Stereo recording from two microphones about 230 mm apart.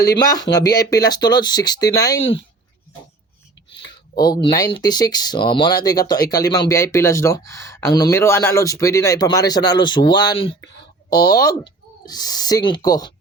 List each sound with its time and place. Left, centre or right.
0.0 s speech: centre
2.1 s speech: left
3.8 s speech: centre